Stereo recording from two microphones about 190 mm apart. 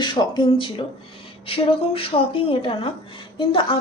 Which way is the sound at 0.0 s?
25° left (ahead or behind).